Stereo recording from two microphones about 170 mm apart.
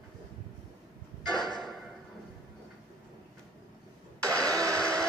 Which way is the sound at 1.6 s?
Centre (ahead or behind).